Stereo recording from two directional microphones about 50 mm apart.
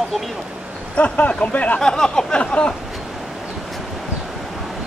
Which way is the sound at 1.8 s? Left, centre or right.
Centre.